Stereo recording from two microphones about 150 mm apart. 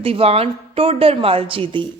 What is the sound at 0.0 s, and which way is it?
A woman's voice, 40° right (ahead or behind).